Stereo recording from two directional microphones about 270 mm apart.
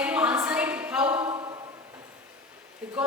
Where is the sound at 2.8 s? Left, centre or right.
Centre.